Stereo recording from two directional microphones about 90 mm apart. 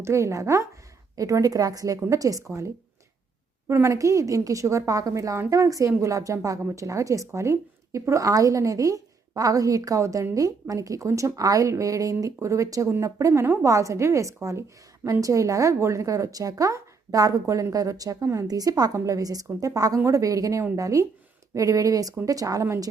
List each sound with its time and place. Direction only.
0.0 s a woman's voice: 35° right (ahead or behind)